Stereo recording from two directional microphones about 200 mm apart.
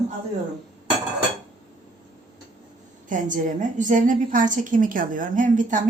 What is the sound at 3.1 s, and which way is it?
A woman's voice, 40° right (ahead or behind).